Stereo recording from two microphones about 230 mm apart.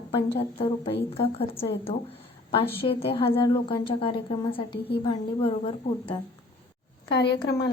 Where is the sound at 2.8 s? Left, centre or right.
Left.